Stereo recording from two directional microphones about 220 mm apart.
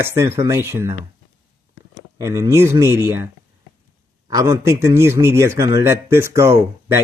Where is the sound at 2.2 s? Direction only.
15° right (ahead or behind).